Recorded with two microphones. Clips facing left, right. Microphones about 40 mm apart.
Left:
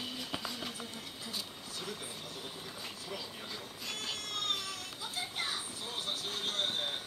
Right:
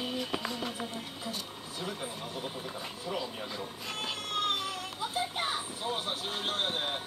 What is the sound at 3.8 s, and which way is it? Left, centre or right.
Cat, right.